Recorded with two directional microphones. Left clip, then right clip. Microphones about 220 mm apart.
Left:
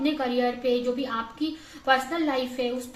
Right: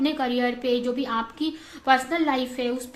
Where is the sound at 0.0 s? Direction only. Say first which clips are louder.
Right 1 dB; 45° right (ahead or behind).